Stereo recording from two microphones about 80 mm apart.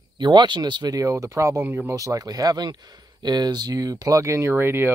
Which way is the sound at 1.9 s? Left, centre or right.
Right.